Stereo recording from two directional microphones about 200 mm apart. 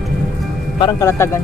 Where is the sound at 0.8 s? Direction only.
15° left (ahead or behind).